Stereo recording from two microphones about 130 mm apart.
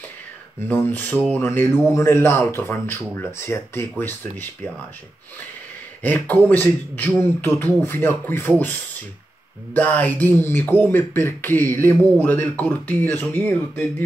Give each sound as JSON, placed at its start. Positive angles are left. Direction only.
{"t": 0.7, "sound": "speech", "side_deg": 15}
{"t": 6.0, "sound": "speech", "side_deg": 10}
{"t": 9.8, "sound": "speech", "side_deg": 10}